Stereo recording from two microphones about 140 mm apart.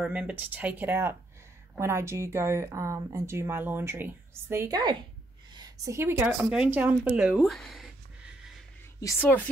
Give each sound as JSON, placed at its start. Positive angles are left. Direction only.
{"t": 0.0, "sound": "speech", "side_deg": -10}
{"t": 5.5, "sound": "a sound", "side_deg": -30}
{"t": 5.9, "sound": "speech", "side_deg": -15}